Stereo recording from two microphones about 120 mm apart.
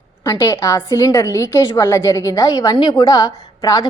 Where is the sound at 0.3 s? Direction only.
25° left (ahead or behind).